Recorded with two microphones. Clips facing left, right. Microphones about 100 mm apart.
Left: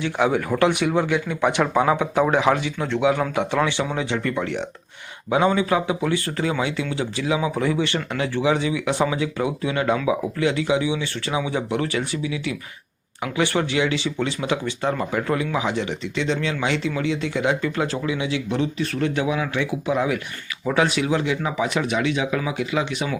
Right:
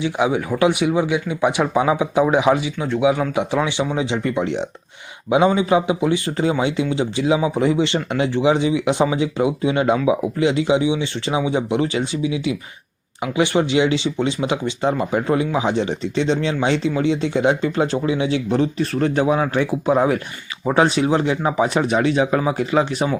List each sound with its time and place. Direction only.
0.0 s speech: 10° right (ahead or behind); by 23.0 s 40° right (ahead or behind)